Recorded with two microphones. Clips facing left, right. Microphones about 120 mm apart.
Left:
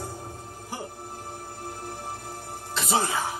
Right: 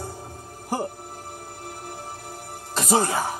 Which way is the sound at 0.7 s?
40° right (ahead or behind).